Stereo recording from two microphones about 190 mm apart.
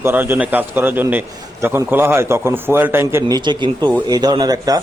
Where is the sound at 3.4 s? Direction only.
25° right (ahead or behind).